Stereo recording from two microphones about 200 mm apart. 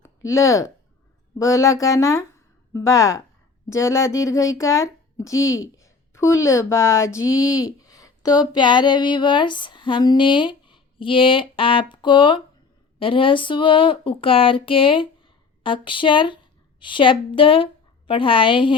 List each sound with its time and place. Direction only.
0.0 s speech: 15° left (ahead or behind)
5.4 s a woman's voice: 75° left (ahead or behind)
5.8 s a sound: 15° left (ahead or behind)
6.7 s a woman's voice: 15° left (ahead or behind)